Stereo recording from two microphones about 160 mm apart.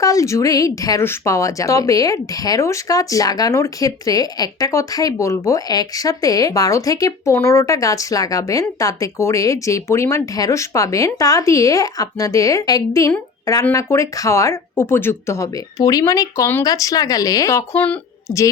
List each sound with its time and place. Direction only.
0.0 s a woman's voice: 20° left (ahead or behind)